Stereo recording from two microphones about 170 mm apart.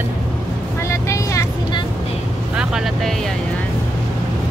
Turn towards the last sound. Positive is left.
turn(degrees=-5)  # may be behind; listen again after turning